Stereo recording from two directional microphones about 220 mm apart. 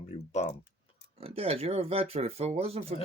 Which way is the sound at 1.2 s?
25° right (ahead or behind).